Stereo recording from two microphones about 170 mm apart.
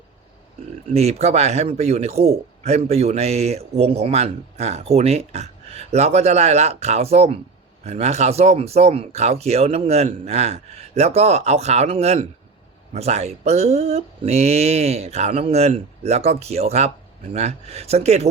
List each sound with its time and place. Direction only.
0.9 s a man's voice: 40° right (ahead or behind)